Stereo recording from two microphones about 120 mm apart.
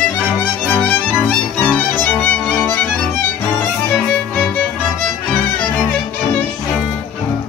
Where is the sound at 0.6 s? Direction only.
15° left (ahead or behind).